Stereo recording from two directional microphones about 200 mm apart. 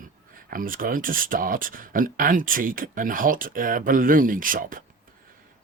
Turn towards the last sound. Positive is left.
turn(degrees=-45)  # may be behind; listen again after turning